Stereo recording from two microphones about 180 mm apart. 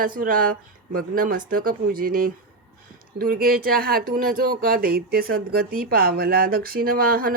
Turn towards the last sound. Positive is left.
turn(degrees=-55)  # may be behind; listen again after turning